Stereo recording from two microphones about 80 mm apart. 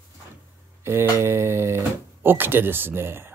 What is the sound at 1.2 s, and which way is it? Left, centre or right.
Speech, right.